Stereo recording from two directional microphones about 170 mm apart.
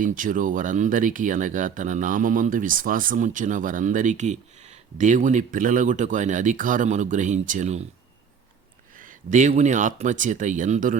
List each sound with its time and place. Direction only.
0.0 s speech: 50° right (ahead or behind)
9.0 s speech: 50° right (ahead or behind)